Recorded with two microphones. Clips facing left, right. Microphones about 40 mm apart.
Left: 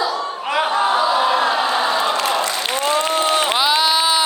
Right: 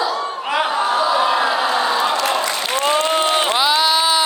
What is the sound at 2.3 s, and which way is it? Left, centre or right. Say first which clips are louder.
Applause: even; centre.